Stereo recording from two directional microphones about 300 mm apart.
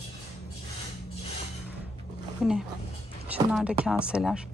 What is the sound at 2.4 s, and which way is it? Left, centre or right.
A woman's voice, centre.